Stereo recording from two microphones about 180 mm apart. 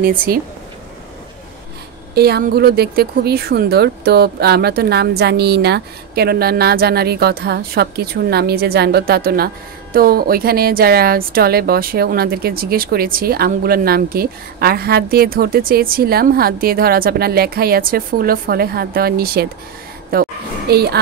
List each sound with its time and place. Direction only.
0.0 s speech: 55° right (ahead or behind)
2.1 s a woman's voice: 60° right (ahead or behind)